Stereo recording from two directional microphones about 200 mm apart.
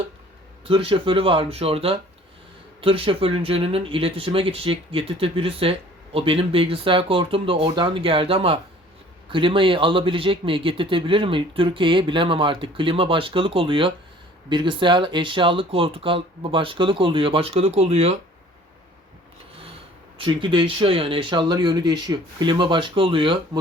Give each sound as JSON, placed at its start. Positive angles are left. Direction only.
{"t": 0.6, "sound": "a man's voice", "side_deg": -30}
{"t": 20.1, "sound": "a man's voice", "side_deg": -25}